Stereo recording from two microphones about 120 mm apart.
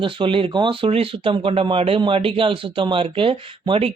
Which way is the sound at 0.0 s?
45° right (ahead or behind).